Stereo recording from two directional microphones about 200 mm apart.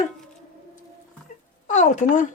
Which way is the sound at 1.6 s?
35° left (ahead or behind).